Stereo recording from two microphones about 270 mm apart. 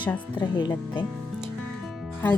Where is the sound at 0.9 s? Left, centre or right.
Centre.